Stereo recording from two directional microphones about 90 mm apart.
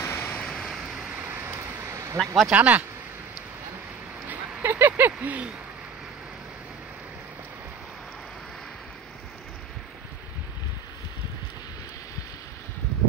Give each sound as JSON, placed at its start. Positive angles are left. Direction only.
{"t": 0.0, "sound": "a sound", "side_deg": 25}
{"t": 0.5, "sound": "vehicle", "side_deg": 5}
{"t": 1.1, "sound": "a sound", "side_deg": -20}
{"t": 2.1, "sound": "speech", "side_deg": 0}
{"t": 2.5, "sound": "speech", "side_deg": -15}
{"t": 4.6, "sound": "vehicle", "side_deg": -25}